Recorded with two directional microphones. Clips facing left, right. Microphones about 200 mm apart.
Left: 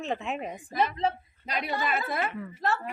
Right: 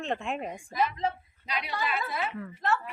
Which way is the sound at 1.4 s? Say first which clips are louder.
Left 3 dB; 45° left (ahead or behind).